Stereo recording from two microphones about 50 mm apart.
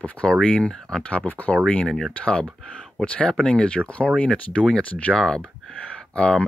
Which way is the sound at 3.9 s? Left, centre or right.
Left.